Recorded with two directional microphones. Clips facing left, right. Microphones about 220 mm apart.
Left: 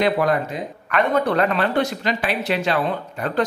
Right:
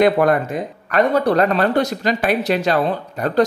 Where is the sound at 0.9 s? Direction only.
40° right (ahead or behind).